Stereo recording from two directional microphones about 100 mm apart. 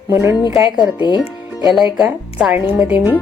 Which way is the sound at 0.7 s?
50° left (ahead or behind).